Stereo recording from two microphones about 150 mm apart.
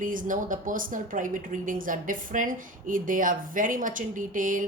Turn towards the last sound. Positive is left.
turn(degrees=-60)  # may be behind; listen again after turning